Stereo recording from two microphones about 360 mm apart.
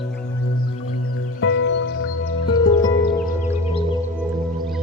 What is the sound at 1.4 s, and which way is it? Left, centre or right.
Music, left.